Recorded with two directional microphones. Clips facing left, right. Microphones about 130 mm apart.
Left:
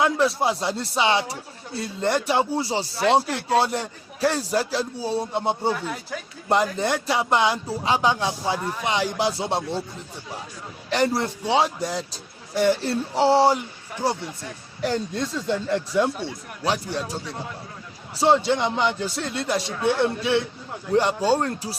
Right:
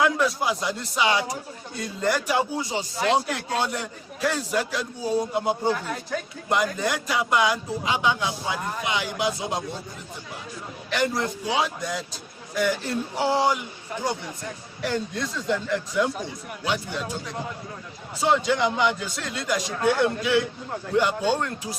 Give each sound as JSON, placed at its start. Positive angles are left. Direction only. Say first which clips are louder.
{"t": 0.0, "sound": "speech", "louder": "left 2 dB", "side_deg": 30}
{"t": 2.9, "sound": "speech", "louder": "left 3 dB", "side_deg": 5}
{"t": 3.6, "sound": "speech", "louder": "left 4 dB", "side_deg": 30}
{"t": 5.6, "sound": "speech", "louder": "even", "side_deg": 0}
{"t": 6.5, "sound": "speech", "louder": "left 3 dB", "side_deg": 30}
{"t": 10.8, "sound": "speech", "louder": "left 3 dB", "side_deg": 35}
{"t": 14.8, "sound": "speech", "louder": "left 3 dB", "side_deg": 30}
{"t": 18.2, "sound": "speech", "louder": "left 2 dB", "side_deg": 30}